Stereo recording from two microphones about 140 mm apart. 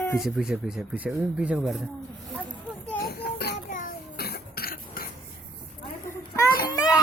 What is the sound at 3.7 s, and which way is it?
Cough, 70° left (ahead or behind).